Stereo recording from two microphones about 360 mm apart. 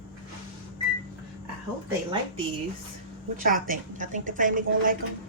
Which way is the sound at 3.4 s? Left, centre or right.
Right.